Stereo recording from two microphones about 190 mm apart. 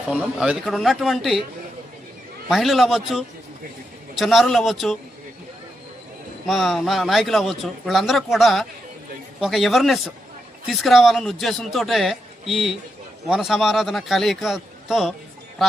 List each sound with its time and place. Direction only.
0.1 s speech: 5° right (ahead or behind)
2.5 s speech: centre (ahead or behind)
6.5 s speech: centre (ahead or behind)